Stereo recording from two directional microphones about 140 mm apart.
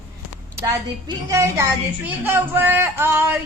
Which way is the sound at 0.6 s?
25° right (ahead or behind).